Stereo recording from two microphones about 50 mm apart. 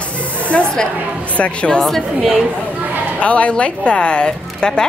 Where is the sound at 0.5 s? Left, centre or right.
Centre.